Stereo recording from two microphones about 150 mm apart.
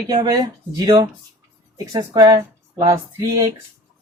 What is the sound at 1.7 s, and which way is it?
Speech, 20° right (ahead or behind).